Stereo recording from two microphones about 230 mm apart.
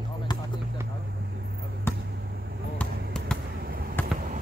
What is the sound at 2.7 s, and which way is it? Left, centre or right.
Basketball bounce, centre.